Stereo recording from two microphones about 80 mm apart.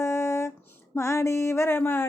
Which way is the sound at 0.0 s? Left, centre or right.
Left.